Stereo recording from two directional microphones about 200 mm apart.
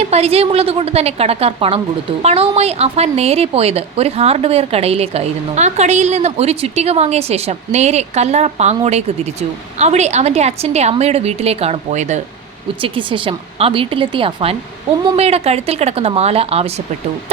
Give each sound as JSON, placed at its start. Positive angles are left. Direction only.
{"t": 0.0, "sound": "a woman's voice", "side_deg": -30}
{"t": 12.8, "sound": "a woman's voice", "side_deg": -25}